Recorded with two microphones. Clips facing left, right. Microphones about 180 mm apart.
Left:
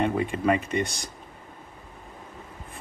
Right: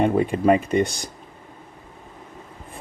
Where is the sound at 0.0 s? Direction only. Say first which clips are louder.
Right 6 dB; 40° right (ahead or behind).